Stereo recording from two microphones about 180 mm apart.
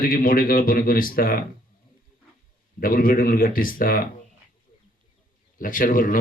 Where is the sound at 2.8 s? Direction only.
50° left (ahead or behind).